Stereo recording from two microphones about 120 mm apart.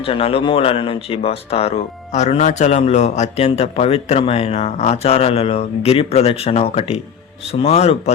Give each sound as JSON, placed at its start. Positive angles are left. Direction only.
{"t": 0.0, "sound": "speech", "side_deg": 50}